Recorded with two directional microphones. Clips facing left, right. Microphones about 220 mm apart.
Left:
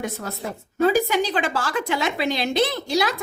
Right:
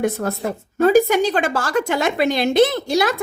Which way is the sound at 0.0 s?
55° right (ahead or behind).